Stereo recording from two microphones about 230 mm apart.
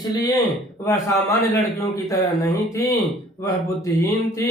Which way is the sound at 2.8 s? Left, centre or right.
Centre.